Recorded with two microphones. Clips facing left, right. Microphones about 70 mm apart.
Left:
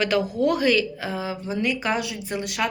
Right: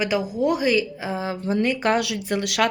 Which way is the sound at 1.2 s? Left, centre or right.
Right.